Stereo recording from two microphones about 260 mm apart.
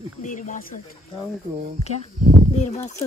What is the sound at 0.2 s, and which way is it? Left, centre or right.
Speech, left.